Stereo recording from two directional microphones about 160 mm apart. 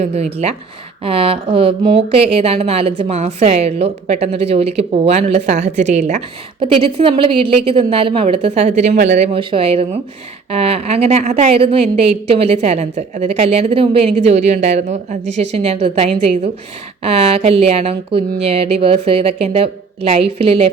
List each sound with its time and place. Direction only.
0.0 s speech: 40° right (ahead or behind)